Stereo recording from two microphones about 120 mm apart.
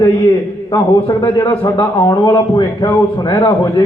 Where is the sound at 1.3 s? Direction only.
40° left (ahead or behind).